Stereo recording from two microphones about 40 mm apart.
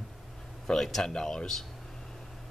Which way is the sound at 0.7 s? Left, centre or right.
Centre.